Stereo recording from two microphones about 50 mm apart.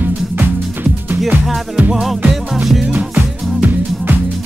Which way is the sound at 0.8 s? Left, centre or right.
Right.